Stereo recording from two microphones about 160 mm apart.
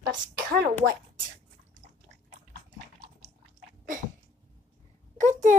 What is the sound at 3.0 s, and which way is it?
Chewing, 45° right (ahead or behind).